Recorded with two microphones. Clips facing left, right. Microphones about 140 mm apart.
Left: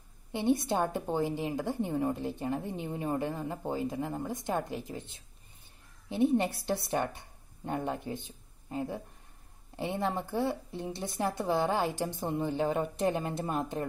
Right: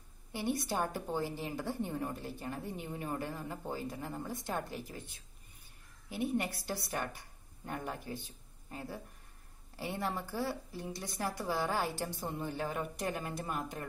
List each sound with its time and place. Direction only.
0.3 s a woman's voice: 20° left (ahead or behind)